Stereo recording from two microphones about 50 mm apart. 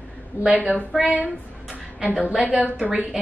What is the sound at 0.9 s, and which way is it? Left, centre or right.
Speech, centre.